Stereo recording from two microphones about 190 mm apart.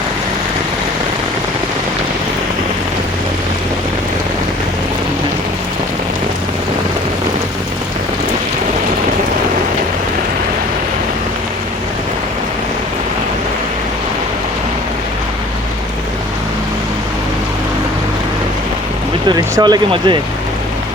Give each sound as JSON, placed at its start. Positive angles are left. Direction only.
{"t": 19.3, "sound": "speech", "side_deg": -20}